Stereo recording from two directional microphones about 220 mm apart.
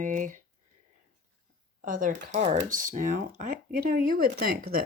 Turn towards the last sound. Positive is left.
turn(degrees=-40)  # may be behind; listen again after turning